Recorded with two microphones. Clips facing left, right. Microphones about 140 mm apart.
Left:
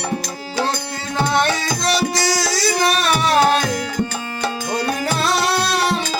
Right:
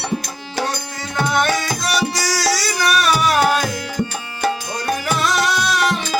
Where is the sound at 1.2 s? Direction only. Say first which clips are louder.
Even; 25° left (ahead or behind).